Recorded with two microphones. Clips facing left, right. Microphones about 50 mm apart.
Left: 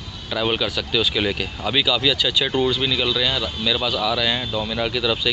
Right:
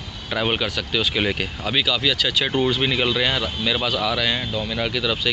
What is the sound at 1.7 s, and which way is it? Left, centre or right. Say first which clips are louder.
Speech: left 2 dB; centre.